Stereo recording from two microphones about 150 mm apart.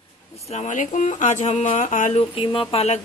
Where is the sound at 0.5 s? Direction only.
50° left (ahead or behind).